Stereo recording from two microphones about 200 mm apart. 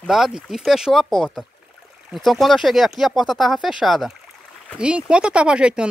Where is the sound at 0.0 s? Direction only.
Centre (ahead or behind).